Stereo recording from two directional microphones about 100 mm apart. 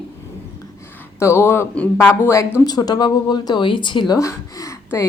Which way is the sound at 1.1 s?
25° left (ahead or behind).